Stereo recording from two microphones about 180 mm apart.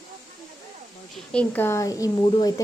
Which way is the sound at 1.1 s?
5° left (ahead or behind).